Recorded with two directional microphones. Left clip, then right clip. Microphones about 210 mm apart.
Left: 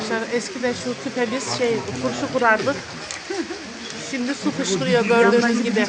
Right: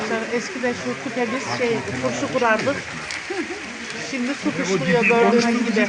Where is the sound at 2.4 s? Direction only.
5° right (ahead or behind).